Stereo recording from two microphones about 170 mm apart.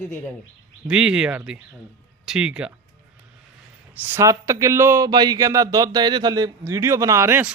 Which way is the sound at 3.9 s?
10° right (ahead or behind).